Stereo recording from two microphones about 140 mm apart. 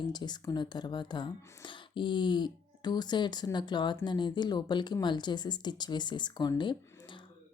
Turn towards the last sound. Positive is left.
turn(degrees=30)  # may be behind; listen again after turning